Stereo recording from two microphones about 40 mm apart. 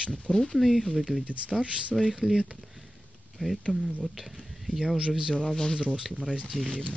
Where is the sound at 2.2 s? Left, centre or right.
Centre.